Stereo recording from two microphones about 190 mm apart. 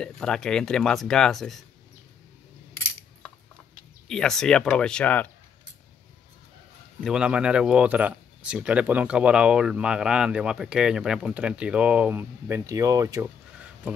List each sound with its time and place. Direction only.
0.0 s speech: 5° left (ahead or behind)
2.7 s coin: 15° left (ahead or behind)
4.1 s speech: 5° left (ahead or behind)
7.0 s speech: 5° right (ahead or behind)